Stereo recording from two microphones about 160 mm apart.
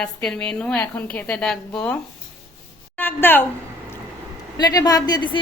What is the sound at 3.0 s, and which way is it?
Speech, 15° left (ahead or behind).